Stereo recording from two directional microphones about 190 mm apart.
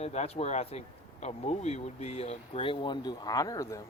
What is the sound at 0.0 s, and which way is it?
Speech, 35° left (ahead or behind).